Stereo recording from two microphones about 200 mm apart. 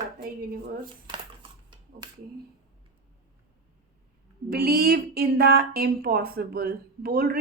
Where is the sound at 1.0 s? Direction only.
25° right (ahead or behind).